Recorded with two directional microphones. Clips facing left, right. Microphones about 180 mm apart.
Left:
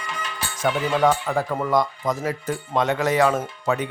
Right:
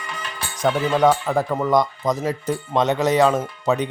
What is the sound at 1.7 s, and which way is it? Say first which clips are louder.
Speech: right 3 dB; 20° right (ahead or behind).